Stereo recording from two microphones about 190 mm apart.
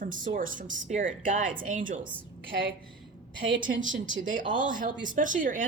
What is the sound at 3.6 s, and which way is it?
Speech, 45° right (ahead or behind).